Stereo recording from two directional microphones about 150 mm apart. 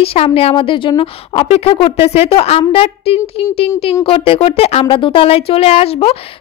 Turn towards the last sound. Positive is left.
turn(degrees=40)  # may be behind; listen again after turning